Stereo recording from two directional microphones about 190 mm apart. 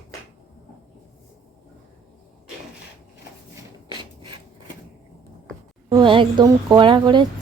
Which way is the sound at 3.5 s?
25° right (ahead or behind).